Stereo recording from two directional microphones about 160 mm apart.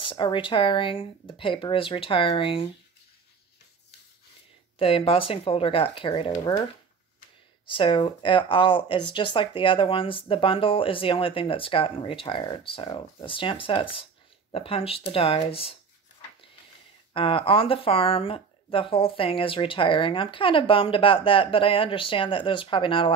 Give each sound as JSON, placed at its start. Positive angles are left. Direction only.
{"t": 0.0, "sound": "speech", "side_deg": 30}
{"t": 4.7, "sound": "speech", "side_deg": 35}
{"t": 7.6, "sound": "speech", "side_deg": 30}
{"t": 17.1, "sound": "speech", "side_deg": 35}